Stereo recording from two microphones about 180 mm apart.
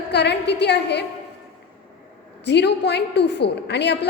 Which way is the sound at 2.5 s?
70° left (ahead or behind).